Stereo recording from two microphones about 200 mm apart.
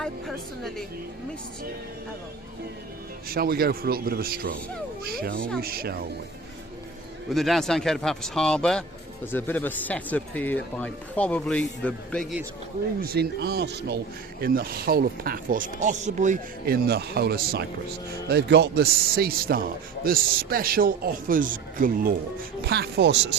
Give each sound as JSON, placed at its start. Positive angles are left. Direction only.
{"t": 0.0, "sound": "a man's voice", "side_deg": 0}
{"t": 3.3, "sound": "speech", "side_deg": -50}
{"t": 7.3, "sound": "a man's voice", "side_deg": 0}
{"t": 13.0, "sound": "speech", "side_deg": -50}
{"t": 22.6, "sound": "speech", "side_deg": -55}